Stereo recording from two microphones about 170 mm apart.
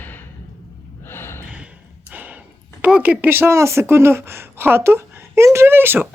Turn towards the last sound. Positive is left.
turn(degrees=-10)  # may be behind; listen again after turning